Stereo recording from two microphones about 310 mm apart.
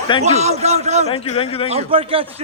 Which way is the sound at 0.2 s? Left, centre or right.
Right.